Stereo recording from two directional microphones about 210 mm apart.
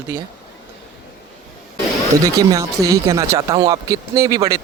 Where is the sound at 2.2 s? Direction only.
15° right (ahead or behind).